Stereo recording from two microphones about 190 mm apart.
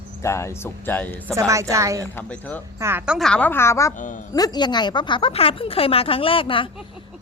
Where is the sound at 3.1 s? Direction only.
5° left (ahead or behind).